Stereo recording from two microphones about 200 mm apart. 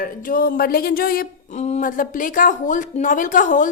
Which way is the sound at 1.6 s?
35° left (ahead or behind).